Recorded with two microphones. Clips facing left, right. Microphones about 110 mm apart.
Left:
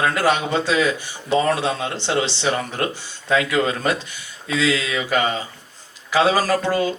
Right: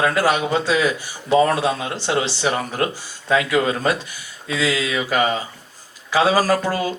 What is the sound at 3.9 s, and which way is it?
Speech, 25° left (ahead or behind).